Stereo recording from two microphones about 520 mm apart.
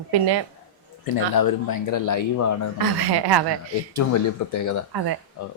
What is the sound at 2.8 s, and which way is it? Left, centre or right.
Speech, right.